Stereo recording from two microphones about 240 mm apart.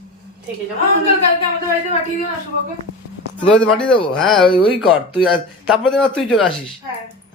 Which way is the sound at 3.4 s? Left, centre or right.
Centre.